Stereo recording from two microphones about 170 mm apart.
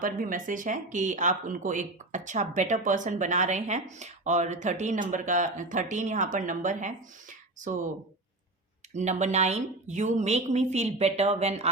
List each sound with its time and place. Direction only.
0.0 s speech: 55° right (ahead or behind)
8.9 s speech: 45° right (ahead or behind)